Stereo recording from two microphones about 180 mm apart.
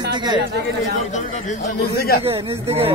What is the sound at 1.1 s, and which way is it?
Speech, 40° left (ahead or behind).